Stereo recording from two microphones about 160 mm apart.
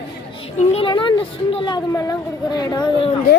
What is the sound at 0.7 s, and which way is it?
Speech, 30° left (ahead or behind).